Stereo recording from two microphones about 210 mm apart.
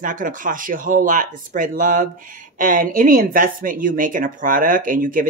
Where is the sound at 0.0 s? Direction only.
40° right (ahead or behind).